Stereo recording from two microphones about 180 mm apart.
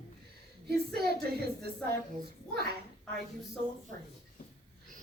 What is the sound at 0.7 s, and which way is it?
Speech, 60° right (ahead or behind).